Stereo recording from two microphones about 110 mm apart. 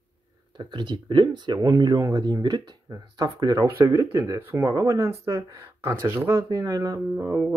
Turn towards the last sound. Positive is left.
turn(degrees=-25)  # may be behind; listen again after turning